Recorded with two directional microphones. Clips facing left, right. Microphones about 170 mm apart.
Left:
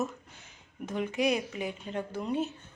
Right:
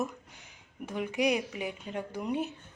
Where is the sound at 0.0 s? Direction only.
15° right (ahead or behind).